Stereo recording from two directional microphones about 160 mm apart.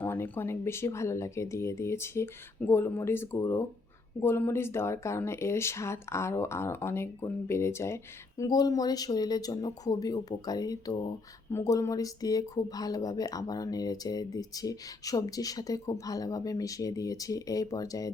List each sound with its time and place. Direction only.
0.0 s speech: 15° left (ahead or behind)